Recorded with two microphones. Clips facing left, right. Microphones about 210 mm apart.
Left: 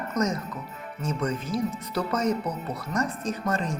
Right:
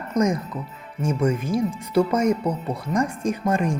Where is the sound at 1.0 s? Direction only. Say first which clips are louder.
Right 6 dB; 10° right (ahead or behind).